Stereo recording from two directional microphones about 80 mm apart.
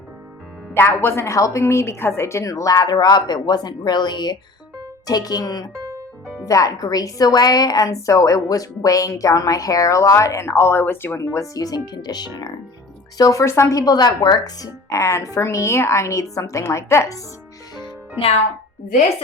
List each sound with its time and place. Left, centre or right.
0.7 s speech: left
2.4 s a woman's voice: left
11.3 s a woman's voice: left
13.4 s speech: left
13.8 s speech: left